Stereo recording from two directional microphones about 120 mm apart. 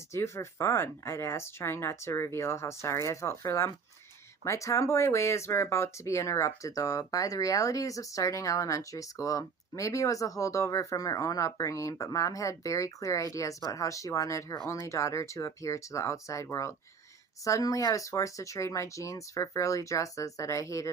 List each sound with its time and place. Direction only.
0.1 s speech: 20° left (ahead or behind)